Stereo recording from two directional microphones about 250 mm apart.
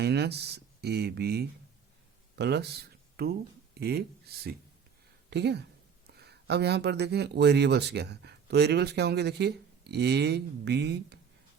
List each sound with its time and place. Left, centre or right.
0.0 s speech: right